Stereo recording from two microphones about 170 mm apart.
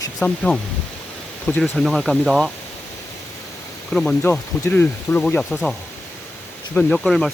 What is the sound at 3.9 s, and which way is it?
Speech, centre (ahead or behind).